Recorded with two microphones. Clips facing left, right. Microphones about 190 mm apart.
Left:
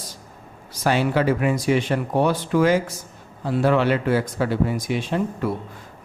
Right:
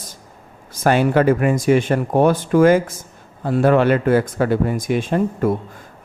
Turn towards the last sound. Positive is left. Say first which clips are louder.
# right 5 dB
turn(degrees=-50)  # may be behind; listen again after turning